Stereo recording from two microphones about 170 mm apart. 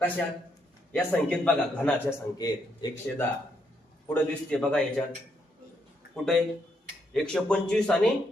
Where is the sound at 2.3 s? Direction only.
20° left (ahead or behind).